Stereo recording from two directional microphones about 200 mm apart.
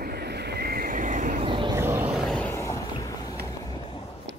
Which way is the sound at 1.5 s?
25° right (ahead or behind).